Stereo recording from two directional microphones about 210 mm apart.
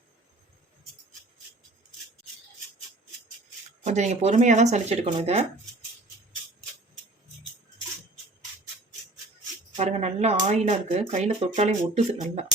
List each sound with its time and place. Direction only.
3.8 s speech: 35° right (ahead or behind)
9.7 s speech: 30° right (ahead or behind)